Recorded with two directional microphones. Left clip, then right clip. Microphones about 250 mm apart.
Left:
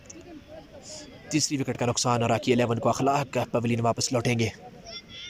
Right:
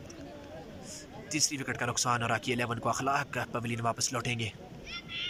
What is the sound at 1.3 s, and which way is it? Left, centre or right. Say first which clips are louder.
Speech: left 4 dB; centre.